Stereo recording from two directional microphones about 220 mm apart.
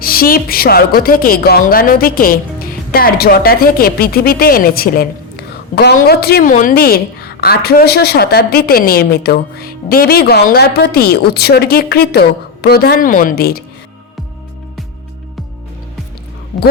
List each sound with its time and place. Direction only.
0.0 s a woman's voice: 40° left (ahead or behind)